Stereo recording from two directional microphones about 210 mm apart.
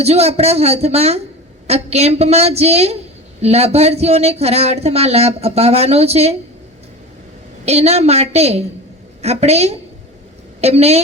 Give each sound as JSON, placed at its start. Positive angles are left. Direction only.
{"t": 0.0, "sound": "a woman's voice", "side_deg": -30}
{"t": 7.6, "sound": "a woman's voice", "side_deg": -30}